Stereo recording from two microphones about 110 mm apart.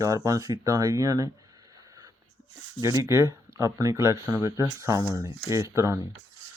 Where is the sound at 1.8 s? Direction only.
35° right (ahead or behind).